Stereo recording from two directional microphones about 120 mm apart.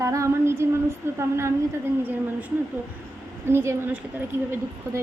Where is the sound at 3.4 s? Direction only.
20° right (ahead or behind).